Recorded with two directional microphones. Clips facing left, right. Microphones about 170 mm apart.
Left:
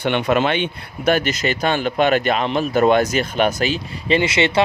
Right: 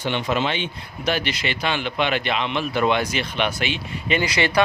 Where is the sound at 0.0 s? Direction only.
60° left (ahead or behind); by 4.2 s 40° left (ahead or behind).